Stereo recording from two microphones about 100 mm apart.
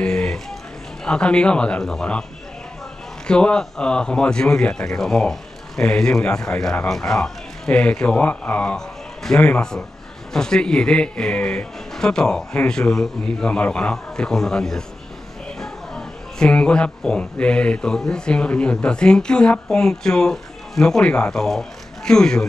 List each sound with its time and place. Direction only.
0.0 s a sound: 10° left (ahead or behind)
1.0 s speech: 10° left (ahead or behind)
3.3 s speech: 10° left (ahead or behind)